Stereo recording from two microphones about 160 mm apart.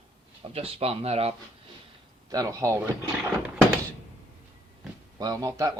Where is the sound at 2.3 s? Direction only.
20° right (ahead or behind).